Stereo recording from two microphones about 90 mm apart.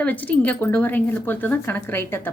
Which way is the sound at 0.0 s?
20° left (ahead or behind).